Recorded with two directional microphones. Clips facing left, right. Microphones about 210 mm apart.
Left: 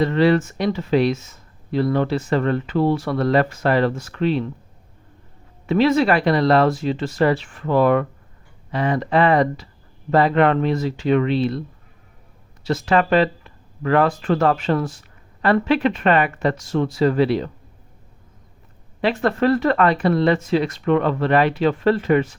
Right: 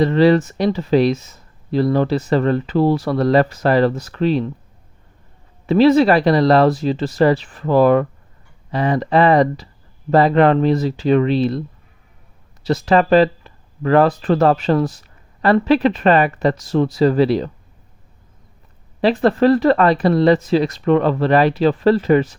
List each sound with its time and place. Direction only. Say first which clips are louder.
0.0 s speech: right 4 dB; 35° right (ahead or behind)
5.6 s speech: right 5 dB; 35° right (ahead or behind)
12.6 s speech: right 3 dB; 35° right (ahead or behind)
19.0 s speech: right 5 dB; 35° right (ahead or behind)